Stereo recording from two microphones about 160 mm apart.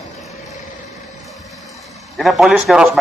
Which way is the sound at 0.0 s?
Centre (ahead or behind).